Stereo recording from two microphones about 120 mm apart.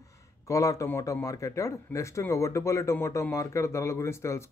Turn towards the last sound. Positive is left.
turn(degrees=20)  # may be behind; listen again after turning